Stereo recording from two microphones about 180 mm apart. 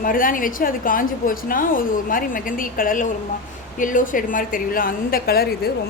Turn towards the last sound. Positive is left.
turn(degrees=60)  # may be behind; listen again after turning